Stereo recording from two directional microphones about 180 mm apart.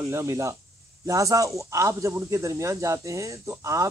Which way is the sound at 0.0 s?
15° right (ahead or behind).